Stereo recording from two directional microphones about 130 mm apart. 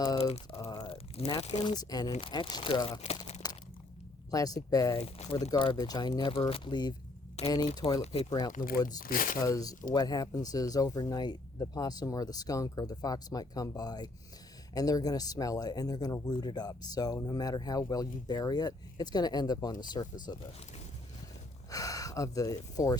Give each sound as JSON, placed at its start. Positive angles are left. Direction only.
{"t": 0.5, "sound": "a sound", "side_deg": 25}
{"t": 0.9, "sound": "crunch", "side_deg": 50}
{"t": 1.4, "sound": "speech", "side_deg": 55}
{"t": 1.6, "sound": "speech", "side_deg": 30}
{"t": 3.4, "sound": "a sound", "side_deg": 30}
{"t": 4.3, "sound": "speech", "side_deg": 30}
{"t": 4.9, "sound": "speech", "side_deg": 50}
{"t": 5.5, "sound": "speech", "side_deg": 40}
{"t": 7.4, "sound": "speech", "side_deg": 55}
{"t": 7.8, "sound": "speech", "side_deg": 30}
{"t": 9.0, "sound": "speech", "side_deg": 90}
{"t": 9.4, "sound": "speech", "side_deg": 25}
{"t": 21.7, "sound": "speech", "side_deg": 25}